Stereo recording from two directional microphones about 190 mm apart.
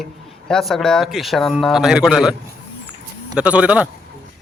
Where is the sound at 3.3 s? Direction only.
5° right (ahead or behind).